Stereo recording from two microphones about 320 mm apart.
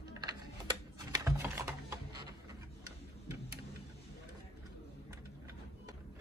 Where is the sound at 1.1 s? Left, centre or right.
Centre.